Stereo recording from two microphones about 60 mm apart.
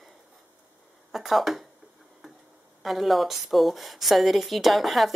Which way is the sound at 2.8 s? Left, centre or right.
Centre.